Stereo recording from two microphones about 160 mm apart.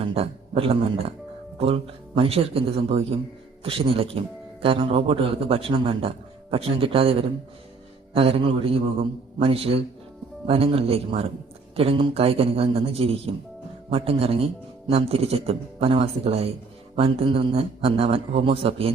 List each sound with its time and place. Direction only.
0.0 s a man's voice: 35° right (ahead or behind)